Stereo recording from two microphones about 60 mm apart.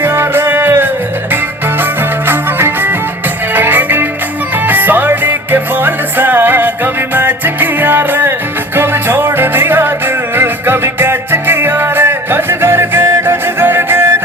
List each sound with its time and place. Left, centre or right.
0.0 s music: right